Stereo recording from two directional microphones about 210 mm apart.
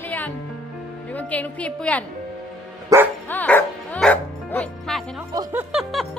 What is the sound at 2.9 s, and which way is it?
Speech, 15° right (ahead or behind).